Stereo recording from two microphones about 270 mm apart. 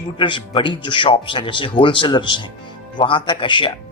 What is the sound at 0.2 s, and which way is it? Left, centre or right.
Speech, centre.